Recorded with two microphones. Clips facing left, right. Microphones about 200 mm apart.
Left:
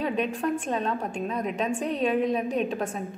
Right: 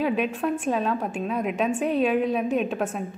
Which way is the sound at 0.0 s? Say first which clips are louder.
Right 2 dB; 5° right (ahead or behind).